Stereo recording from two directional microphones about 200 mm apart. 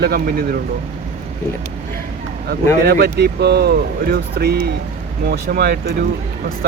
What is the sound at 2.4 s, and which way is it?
Speech, 50° right (ahead or behind).